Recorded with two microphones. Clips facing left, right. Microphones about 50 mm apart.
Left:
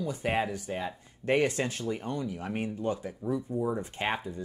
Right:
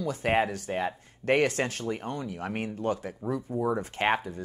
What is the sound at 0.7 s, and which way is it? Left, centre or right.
Speech, right.